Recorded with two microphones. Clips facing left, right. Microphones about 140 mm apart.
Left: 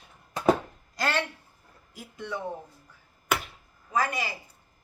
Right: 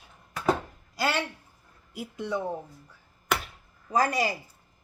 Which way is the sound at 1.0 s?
10° right (ahead or behind).